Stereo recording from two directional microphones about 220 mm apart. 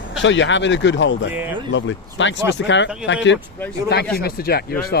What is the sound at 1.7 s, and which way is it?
Speech, 55° left (ahead or behind).